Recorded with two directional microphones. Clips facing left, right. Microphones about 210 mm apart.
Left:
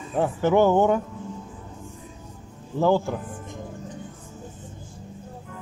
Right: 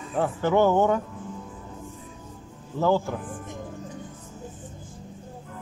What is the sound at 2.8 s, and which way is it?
Speech, 15° left (ahead or behind).